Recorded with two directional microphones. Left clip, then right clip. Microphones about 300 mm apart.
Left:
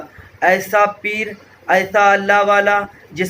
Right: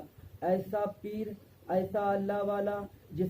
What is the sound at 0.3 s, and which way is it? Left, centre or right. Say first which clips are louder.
A man's voice: left 18 dB; left.